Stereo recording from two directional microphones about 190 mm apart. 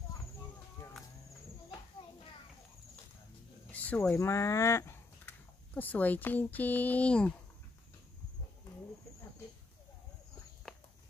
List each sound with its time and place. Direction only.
3.7 s speech: 10° left (ahead or behind)
10.7 s walk: centre (ahead or behind)